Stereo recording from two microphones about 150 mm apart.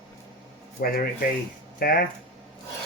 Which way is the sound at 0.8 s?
80° left.